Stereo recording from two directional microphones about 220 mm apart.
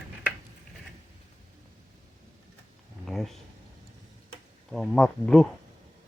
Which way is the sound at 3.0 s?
Centre (ahead or behind).